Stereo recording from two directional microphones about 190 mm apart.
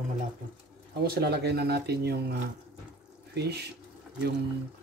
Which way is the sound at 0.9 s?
60° right (ahead or behind).